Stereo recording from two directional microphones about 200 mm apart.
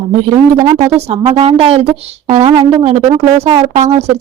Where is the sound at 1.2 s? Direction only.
30° right (ahead or behind).